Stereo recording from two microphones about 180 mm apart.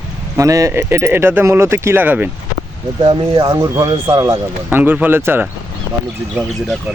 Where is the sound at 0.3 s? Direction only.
15° right (ahead or behind).